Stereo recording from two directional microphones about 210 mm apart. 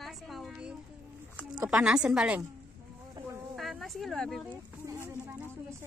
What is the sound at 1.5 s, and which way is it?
Speech, 5° right (ahead or behind).